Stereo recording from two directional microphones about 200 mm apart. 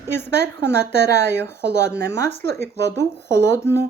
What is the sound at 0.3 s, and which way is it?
Speech, 55° right (ahead or behind).